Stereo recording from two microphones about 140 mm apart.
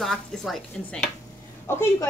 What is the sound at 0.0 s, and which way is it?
A woman's voice, 5° left (ahead or behind).